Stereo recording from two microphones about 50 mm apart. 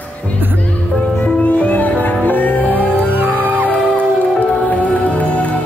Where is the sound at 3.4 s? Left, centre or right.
Right.